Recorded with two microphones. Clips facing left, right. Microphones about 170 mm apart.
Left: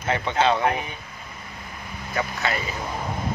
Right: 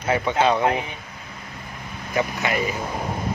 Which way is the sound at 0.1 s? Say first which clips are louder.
Right 2 dB; 15° right (ahead or behind).